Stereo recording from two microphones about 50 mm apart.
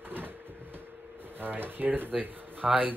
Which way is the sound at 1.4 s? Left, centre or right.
Right.